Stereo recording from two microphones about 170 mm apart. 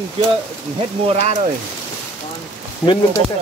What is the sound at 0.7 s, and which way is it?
Speech, 40° right (ahead or behind).